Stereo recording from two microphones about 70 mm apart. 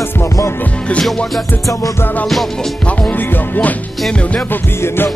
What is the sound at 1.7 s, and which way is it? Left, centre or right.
Music, left.